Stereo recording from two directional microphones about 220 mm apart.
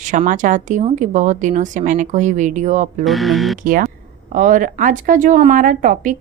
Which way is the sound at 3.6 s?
40° right (ahead or behind).